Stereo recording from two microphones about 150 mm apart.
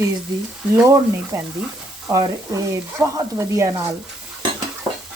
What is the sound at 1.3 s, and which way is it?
Speech, 20° right (ahead or behind).